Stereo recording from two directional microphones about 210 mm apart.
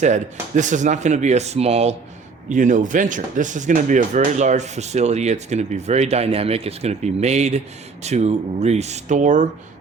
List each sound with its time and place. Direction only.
0.0 s speech: 35° right (ahead or behind)